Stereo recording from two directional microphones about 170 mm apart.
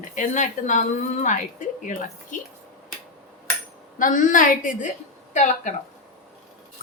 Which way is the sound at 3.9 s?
50° left (ahead or behind).